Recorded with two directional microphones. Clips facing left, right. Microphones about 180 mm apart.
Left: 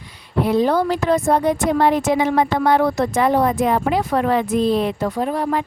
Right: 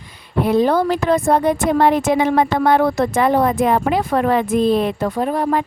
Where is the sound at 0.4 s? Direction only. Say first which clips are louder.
Right 2 dB; 55° right (ahead or behind).